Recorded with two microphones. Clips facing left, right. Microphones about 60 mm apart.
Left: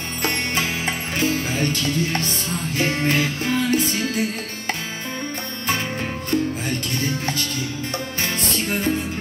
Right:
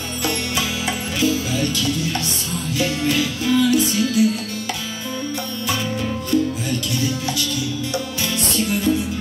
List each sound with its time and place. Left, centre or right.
0.2 s music: left
6.3 s music: left